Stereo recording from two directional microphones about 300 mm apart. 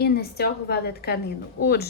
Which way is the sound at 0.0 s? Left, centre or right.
Left.